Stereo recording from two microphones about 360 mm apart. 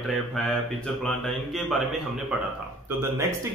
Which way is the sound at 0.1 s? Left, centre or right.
Centre.